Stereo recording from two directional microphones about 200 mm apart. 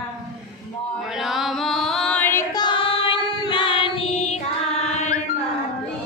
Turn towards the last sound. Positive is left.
turn(degrees=35)  # may be behind; listen again after turning